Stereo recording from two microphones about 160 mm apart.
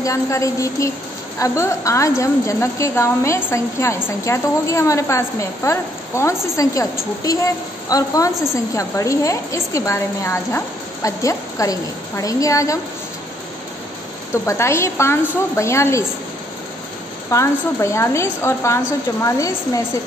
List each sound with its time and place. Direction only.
0.0 s a woman's voice: 20° left (ahead or behind)
14.3 s a woman's voice: 15° left (ahead or behind)
17.3 s a woman's voice: 20° left (ahead or behind)